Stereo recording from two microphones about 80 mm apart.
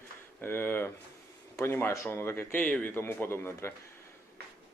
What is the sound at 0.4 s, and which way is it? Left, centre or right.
A man's voice, left.